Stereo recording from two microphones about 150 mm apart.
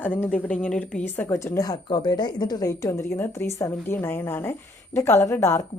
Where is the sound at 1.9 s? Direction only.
30° left (ahead or behind).